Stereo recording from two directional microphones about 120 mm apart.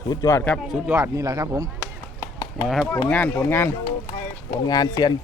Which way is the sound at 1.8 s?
25° left (ahead or behind).